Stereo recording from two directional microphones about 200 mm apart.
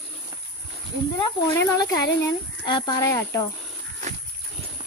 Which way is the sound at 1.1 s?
15° left (ahead or behind).